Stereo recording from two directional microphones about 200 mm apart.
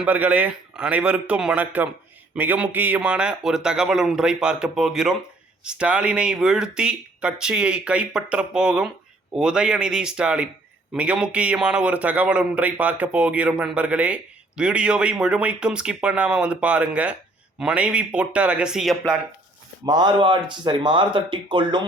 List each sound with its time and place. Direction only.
0.0 s a man's voice: 10° right (ahead or behind)
19.8 s speech: 20° right (ahead or behind)